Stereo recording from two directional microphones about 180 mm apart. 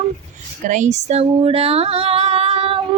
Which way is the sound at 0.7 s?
40° right (ahead or behind).